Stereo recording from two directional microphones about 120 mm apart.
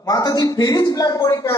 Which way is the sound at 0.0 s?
30° left (ahead or behind).